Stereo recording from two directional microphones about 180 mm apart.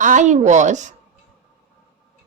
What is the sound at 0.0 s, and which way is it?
Speech, 45° right (ahead or behind).